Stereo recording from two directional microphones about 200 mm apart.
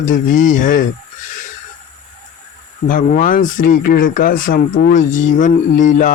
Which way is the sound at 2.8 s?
45° left (ahead or behind).